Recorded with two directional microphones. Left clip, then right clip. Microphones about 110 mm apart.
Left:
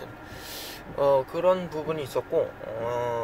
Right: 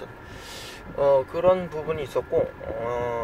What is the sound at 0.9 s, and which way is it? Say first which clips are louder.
Speech: right 2 dB; 15° left (ahead or behind).